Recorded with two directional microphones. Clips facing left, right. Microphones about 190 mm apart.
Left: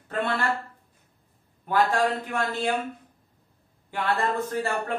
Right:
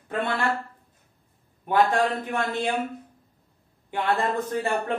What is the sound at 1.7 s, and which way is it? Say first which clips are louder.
Speech: right 2 dB; 20° right (ahead or behind).